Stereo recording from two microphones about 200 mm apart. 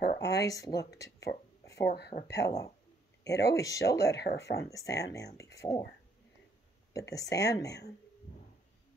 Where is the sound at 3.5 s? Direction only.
15° left (ahead or behind).